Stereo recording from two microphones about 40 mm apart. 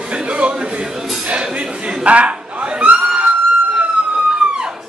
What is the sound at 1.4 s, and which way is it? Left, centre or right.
Speech, right.